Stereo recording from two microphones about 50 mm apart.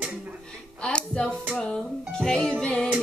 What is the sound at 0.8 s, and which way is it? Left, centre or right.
Music, centre.